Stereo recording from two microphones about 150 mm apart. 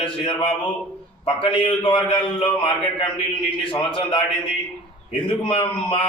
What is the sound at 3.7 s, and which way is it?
Speech, 35° left (ahead or behind).